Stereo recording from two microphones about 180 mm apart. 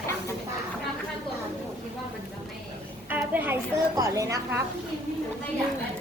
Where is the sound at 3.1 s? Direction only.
10° right (ahead or behind).